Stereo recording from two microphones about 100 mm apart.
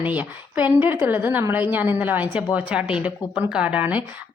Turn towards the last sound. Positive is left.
turn(degrees=-15)  # may be behind; listen again after turning